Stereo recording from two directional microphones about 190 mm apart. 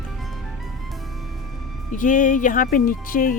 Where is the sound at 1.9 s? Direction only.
45° left (ahead or behind).